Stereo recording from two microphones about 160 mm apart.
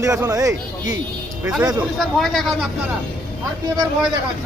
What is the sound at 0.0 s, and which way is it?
Speech, 20° right (ahead or behind).